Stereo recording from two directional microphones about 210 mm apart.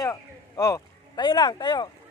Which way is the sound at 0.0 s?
15° left (ahead or behind).